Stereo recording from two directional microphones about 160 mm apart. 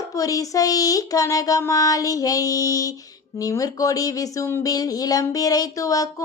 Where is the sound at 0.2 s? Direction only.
20° left (ahead or behind).